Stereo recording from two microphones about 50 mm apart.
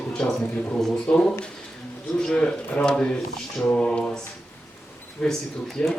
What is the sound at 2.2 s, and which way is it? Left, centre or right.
Speech, left.